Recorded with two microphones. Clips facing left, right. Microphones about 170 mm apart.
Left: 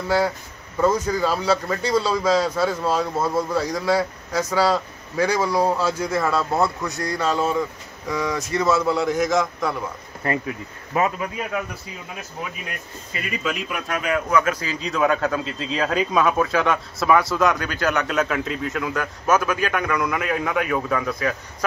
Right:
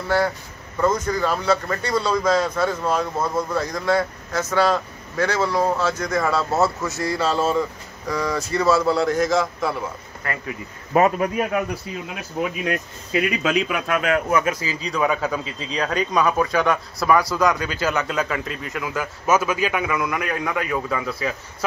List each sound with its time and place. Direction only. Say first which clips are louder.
0.7 s a man's voice: left 1 dB; 10° left (ahead or behind)
10.2 s speech: left 6 dB; 25° left (ahead or behind)
10.9 s a man's voice: right 5 dB; 45° right (ahead or behind)
12.6 s speech: right 10 dB; 90° right
14.5 s speech: even; 5° right (ahead or behind)